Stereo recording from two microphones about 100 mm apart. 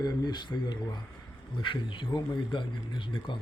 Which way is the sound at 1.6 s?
55° left (ahead or behind).